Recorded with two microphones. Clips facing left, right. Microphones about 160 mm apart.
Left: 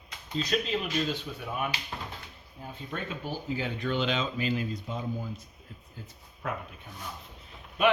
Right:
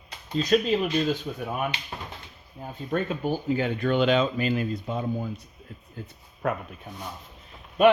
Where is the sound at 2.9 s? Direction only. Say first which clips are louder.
Right 9 dB; 55° right (ahead or behind).